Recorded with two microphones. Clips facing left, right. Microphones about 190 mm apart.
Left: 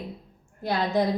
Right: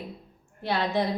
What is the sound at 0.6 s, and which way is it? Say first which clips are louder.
Speech: left 2 dB; 45° left (ahead or behind).